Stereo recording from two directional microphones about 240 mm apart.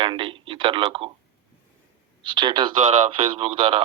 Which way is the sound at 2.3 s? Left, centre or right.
Centre.